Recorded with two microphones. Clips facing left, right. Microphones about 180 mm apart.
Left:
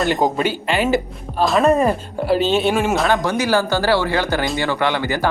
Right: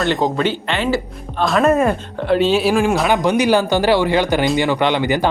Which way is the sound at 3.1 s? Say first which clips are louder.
Right 3 dB; 20° right (ahead or behind).